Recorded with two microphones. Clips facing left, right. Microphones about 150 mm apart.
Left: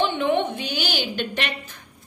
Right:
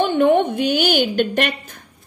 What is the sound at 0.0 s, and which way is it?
A woman's voice, 50° right (ahead or behind).